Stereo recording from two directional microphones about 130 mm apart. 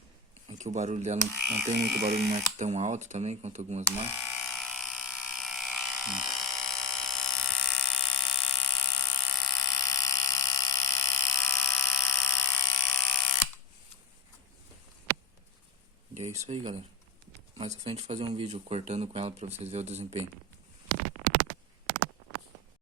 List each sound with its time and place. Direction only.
0.6 s speech: 65° right (ahead or behind)
1.4 s speech: 5° right (ahead or behind)
2.6 s speech: 60° right (ahead or behind)
3.9 s speech: 10° right (ahead or behind)
4.5 s electric toothbrush: centre (ahead or behind)
5.3 s electric shaver: centre (ahead or behind)
9.6 s a sound: 25° left (ahead or behind)
12.9 s electric shaver: centre (ahead or behind)
16.1 s a sound: 60° right (ahead or behind)
16.6 s speech: 50° right (ahead or behind)